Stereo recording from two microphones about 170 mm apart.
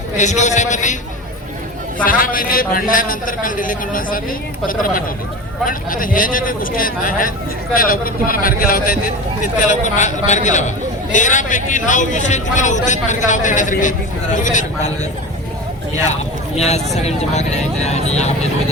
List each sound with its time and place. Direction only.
0.2 s a man's voice: 45° left (ahead or behind)
2.0 s a man's voice: 55° left (ahead or behind)
9.6 s a man's voice: 45° left (ahead or behind)
16.6 s speech: 40° left (ahead or behind)